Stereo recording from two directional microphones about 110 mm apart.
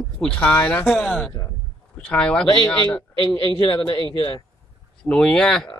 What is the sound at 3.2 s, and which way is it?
A man's voice, 40° left (ahead or behind).